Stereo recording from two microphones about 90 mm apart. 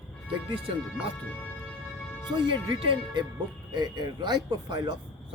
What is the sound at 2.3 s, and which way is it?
Speech, 65° right (ahead or behind).